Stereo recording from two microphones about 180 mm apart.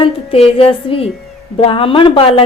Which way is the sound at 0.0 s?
30° left (ahead or behind).